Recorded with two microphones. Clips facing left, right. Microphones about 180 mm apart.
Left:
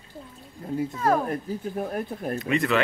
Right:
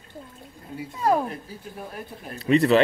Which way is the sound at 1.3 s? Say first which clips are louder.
Left 7 dB; 50° left (ahead or behind).